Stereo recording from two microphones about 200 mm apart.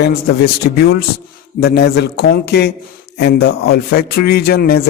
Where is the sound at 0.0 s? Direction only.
50° left (ahead or behind).